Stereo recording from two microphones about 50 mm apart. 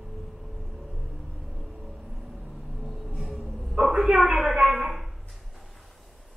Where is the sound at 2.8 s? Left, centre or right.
Centre.